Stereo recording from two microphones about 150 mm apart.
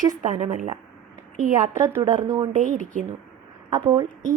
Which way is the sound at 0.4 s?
60° right (ahead or behind).